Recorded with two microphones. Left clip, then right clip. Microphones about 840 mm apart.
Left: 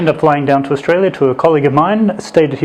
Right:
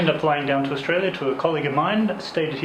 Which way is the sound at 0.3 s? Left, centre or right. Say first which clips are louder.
Left 9 dB; left.